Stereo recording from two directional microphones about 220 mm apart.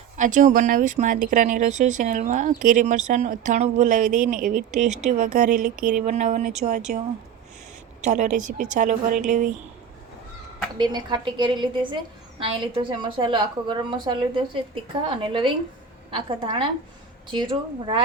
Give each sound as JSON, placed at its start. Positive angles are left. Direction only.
{"t": 0.2, "sound": "speech", "side_deg": -35}
{"t": 8.0, "sound": "speech", "side_deg": -35}
{"t": 10.8, "sound": "a woman's voice", "side_deg": -20}